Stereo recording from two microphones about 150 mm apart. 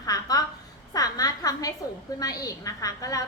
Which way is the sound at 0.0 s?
25° left (ahead or behind).